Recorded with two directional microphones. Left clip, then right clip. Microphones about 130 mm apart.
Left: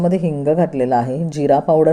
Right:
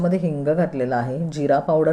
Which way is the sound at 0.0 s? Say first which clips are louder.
Left 4 dB; 30° left (ahead or behind).